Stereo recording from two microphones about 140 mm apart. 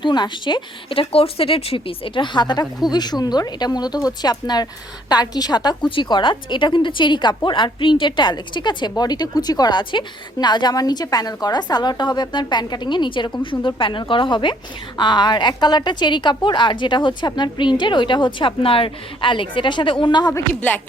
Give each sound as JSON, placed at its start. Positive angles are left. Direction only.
{"t": 0.0, "sound": "a woman's voice", "side_deg": 35}
{"t": 20.5, "sound": "speech", "side_deg": 10}